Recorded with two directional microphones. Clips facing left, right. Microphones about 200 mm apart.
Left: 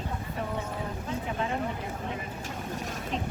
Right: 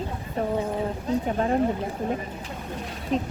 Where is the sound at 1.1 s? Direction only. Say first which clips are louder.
Right 8 dB; 40° right (ahead or behind).